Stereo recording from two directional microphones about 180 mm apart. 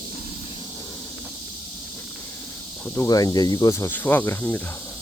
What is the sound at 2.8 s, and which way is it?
Speech, 15° left (ahead or behind).